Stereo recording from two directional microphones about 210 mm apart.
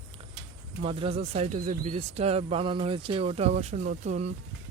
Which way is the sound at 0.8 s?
25° right (ahead or behind).